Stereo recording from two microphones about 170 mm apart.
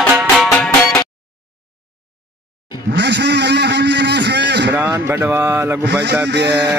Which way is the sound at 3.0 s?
80° right.